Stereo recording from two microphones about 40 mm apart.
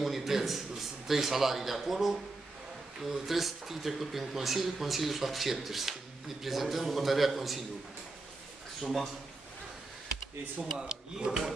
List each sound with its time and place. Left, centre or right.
0.0 s speech: centre
8.8 s speech: centre
10.8 s speech: centre